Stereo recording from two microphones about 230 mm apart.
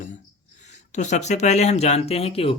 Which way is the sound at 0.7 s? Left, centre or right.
Left.